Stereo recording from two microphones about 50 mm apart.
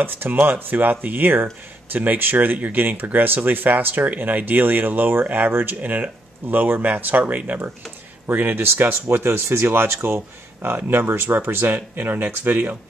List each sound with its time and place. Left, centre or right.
0.0 s speech: right
8.3 s speech: right